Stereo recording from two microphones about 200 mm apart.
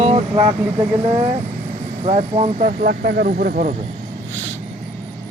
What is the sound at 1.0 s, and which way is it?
Speech, 30° right (ahead or behind).